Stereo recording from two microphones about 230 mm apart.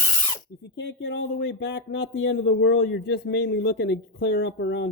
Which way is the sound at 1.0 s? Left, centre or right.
Left.